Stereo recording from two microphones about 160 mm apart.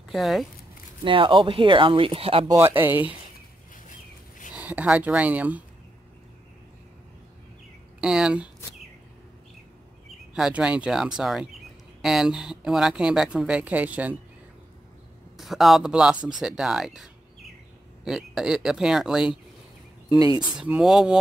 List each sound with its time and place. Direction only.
0.1 s speech: centre (ahead or behind)
1.0 s speech: 30° right (ahead or behind)
2.4 s speech: 15° right (ahead or behind)
4.6 s speech: 10° right (ahead or behind)
8.0 s speech: 5° right (ahead or behind)
10.3 s speech: 5° right (ahead or behind)
15.3 s a man's voice: centre (ahead or behind)
20.5 s speech: 5° right (ahead or behind)